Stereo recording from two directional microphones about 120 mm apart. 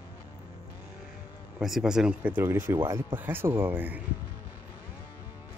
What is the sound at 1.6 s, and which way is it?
Speech, 5° right (ahead or behind).